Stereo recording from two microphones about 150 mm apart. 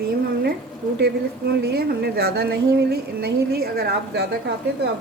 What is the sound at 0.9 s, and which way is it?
Speech, 90° right.